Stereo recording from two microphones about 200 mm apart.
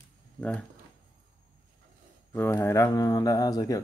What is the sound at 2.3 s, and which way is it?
Speech, 10° left (ahead or behind).